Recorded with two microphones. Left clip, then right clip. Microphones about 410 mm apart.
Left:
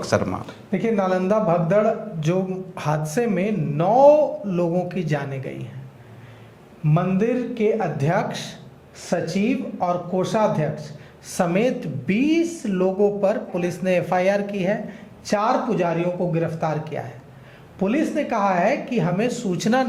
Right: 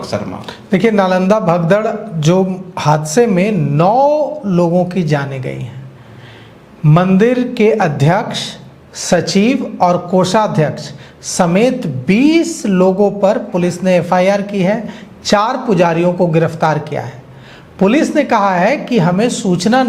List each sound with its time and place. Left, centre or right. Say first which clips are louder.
0.1 s speech: even; left
0.7 s a woman's voice: right 9 dB; right
6.8 s a woman's voice: right 11 dB; right